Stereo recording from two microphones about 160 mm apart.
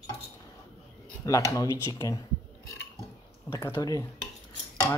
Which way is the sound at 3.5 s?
20° left (ahead or behind).